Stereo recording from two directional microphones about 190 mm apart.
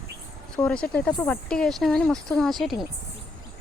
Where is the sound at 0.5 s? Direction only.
5° left (ahead or behind).